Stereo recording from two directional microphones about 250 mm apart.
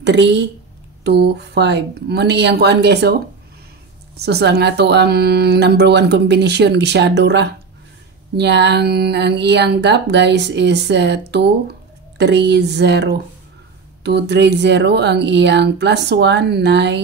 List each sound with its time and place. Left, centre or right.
0.0 s speech: right
4.2 s speech: right